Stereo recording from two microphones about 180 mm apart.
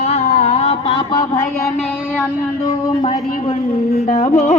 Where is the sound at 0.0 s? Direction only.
35° left (ahead or behind).